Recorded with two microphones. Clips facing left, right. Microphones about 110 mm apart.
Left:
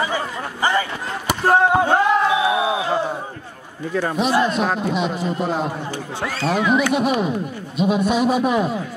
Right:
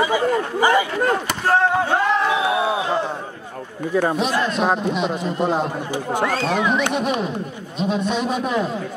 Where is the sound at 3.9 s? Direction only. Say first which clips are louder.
Right 3 dB; 10° right (ahead or behind).